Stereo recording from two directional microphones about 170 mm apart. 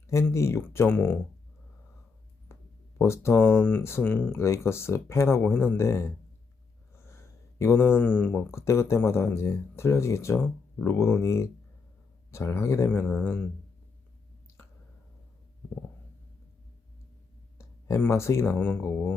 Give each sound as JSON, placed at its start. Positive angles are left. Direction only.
{"t": 0.1, "sound": "speech", "side_deg": 15}
{"t": 2.5, "sound": "a sound", "side_deg": 15}
{"t": 3.0, "sound": "speech", "side_deg": 15}
{"t": 17.6, "sound": "speech", "side_deg": 15}